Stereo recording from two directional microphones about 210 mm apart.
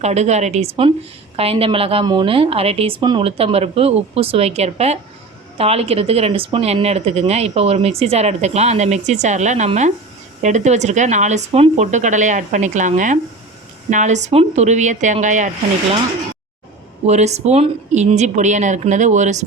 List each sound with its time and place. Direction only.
0.0 s speech: 30° right (ahead or behind)
17.1 s speech: 30° right (ahead or behind)